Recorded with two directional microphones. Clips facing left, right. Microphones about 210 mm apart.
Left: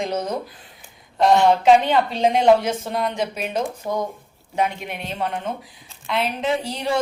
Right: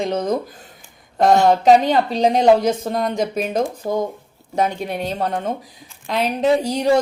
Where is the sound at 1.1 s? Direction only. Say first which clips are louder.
Right 2 dB; 45° right (ahead or behind).